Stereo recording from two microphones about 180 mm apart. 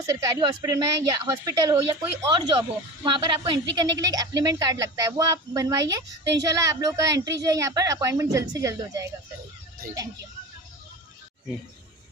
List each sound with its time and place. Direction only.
0.0 s a woman's voice: 20° right (ahead or behind)